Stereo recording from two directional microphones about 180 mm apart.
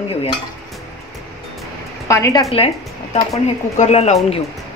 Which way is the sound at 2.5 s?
35° left (ahead or behind).